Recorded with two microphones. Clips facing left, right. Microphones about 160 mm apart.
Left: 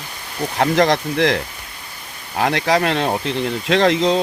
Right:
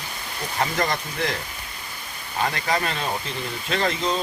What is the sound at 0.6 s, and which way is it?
Speech, 75° left (ahead or behind).